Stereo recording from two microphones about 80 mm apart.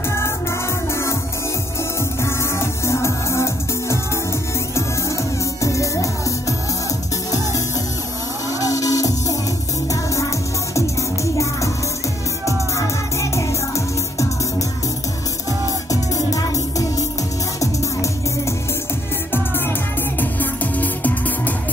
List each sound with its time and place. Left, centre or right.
2.2 s music: left
8.5 s music: left
10.7 s music: left
12.7 s music: left
15.9 s music: left
20.2 s music: left